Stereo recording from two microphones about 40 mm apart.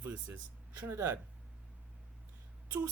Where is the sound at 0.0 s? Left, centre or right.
Right.